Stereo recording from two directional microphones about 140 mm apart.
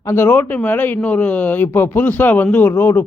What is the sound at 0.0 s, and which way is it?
Speech, 20° left (ahead or behind).